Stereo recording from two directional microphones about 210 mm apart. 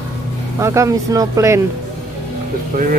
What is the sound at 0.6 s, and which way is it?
Speech, 15° right (ahead or behind).